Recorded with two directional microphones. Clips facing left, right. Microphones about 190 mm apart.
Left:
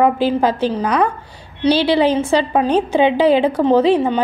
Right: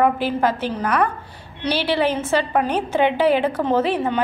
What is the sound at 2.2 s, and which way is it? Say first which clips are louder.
A woman's voice: left 4 dB; 20° left (ahead or behind).